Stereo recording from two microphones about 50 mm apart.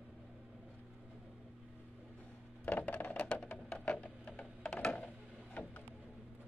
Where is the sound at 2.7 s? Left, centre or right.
Left.